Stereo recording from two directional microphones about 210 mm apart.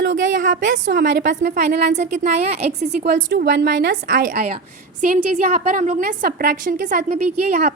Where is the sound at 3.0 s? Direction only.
45° right (ahead or behind).